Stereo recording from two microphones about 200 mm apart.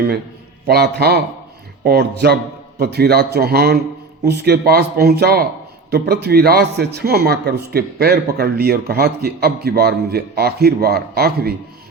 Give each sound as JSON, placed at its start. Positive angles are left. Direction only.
{"t": 0.7, "sound": "speech", "side_deg": -55}